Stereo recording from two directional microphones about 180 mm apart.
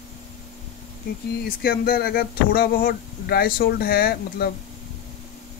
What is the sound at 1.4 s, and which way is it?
Speech, 55° left (ahead or behind).